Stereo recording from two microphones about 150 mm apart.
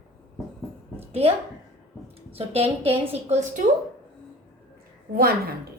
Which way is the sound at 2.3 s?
40° right (ahead or behind).